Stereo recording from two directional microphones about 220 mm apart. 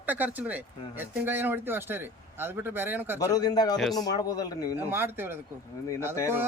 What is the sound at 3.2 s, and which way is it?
Speech, 15° left (ahead or behind).